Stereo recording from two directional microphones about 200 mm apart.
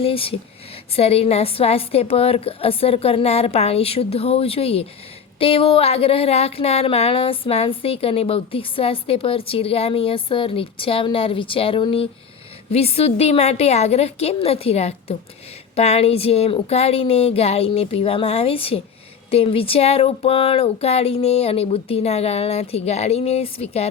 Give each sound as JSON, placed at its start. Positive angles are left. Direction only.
{"t": 0.0, "sound": "speech", "side_deg": 30}